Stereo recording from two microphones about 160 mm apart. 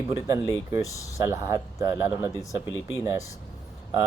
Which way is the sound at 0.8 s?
20° left (ahead or behind).